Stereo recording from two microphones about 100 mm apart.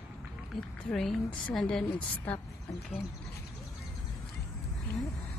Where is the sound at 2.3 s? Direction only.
15° left (ahead or behind).